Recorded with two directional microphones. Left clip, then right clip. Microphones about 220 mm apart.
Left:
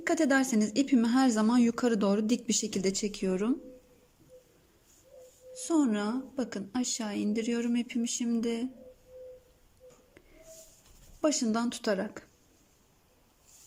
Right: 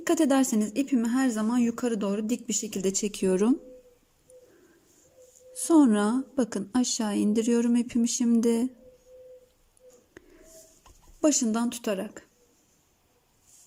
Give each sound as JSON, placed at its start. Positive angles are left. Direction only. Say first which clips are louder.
{"t": 0.0, "sound": "a woman's voice", "louder": "right 3 dB", "side_deg": -15}
{"t": 5.5, "sound": "a woman's voice", "louder": "right 7 dB", "side_deg": -20}
{"t": 10.2, "sound": "wheeze", "louder": "right 7 dB", "side_deg": -20}
{"t": 11.2, "sound": "a woman's voice", "louder": "right 4 dB", "side_deg": -15}